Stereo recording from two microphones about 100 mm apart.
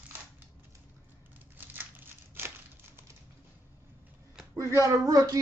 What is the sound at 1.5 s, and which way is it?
Crumpling, 20° right (ahead or behind).